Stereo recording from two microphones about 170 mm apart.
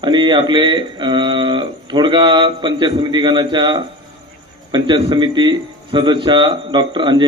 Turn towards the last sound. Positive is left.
turn(degrees=-25)  # may be behind; listen again after turning